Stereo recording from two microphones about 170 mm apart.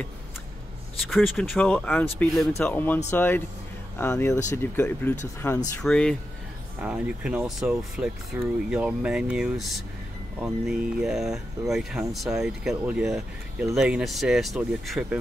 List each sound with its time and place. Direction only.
1.1 s speech: centre (ahead or behind)
6.8 s speech: 5° right (ahead or behind)